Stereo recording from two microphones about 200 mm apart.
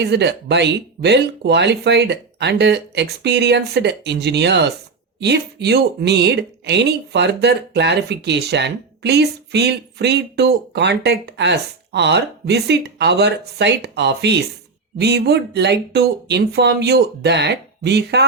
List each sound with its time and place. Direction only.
0.0 s a woman's voice: 55° right (ahead or behind)